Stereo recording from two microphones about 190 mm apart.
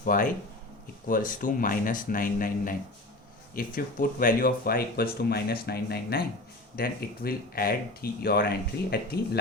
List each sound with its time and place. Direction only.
0.0 s speech: 45° left (ahead or behind)